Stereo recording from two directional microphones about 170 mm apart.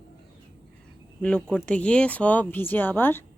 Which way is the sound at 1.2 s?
5° left (ahead or behind).